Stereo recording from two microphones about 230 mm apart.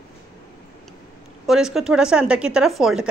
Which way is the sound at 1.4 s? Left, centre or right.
Centre.